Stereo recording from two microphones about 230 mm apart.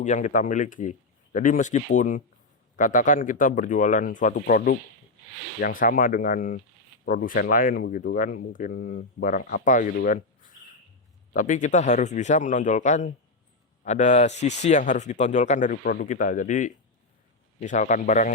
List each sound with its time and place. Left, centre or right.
0.0 s speech: left